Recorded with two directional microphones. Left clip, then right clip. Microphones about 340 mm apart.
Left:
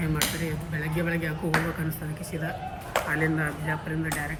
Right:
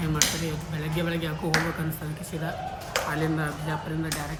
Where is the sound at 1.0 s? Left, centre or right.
Centre.